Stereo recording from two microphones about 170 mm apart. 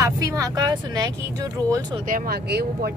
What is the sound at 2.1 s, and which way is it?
Speech, 70° right (ahead or behind).